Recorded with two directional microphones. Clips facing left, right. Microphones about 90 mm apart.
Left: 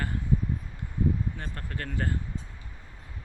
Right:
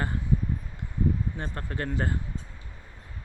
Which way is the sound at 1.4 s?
30° right (ahead or behind).